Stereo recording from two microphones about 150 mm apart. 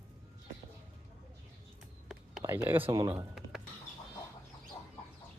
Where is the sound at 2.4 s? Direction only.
15° right (ahead or behind).